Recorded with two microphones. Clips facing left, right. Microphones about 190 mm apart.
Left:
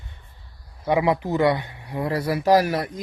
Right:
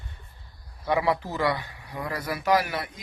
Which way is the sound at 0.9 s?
20° left (ahead or behind).